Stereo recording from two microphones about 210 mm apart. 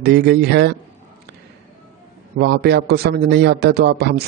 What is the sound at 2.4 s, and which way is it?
A man's voice, 50° right (ahead or behind).